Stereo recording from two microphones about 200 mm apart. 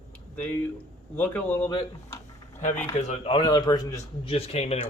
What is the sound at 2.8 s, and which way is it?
A man's voice, 30° left (ahead or behind).